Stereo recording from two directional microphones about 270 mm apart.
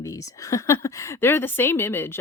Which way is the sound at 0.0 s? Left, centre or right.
Centre.